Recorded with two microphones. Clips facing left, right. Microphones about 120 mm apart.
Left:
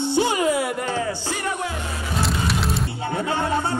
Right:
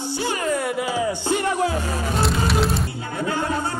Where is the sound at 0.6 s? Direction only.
Centre (ahead or behind); by 1.4 s 20° right (ahead or behind).